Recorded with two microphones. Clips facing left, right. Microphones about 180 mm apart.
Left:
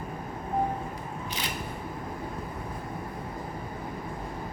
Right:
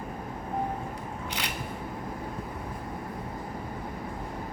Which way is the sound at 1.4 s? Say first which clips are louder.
Left 1 dB; 70° right (ahead or behind).